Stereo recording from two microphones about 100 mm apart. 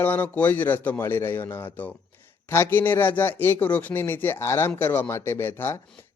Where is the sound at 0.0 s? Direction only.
20° left (ahead or behind).